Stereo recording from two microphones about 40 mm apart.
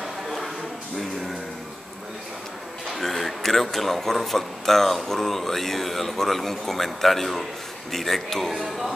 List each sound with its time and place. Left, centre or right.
2.9 s a man's voice: centre